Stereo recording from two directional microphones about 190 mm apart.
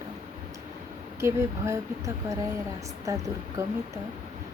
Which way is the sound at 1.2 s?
15° right (ahead or behind).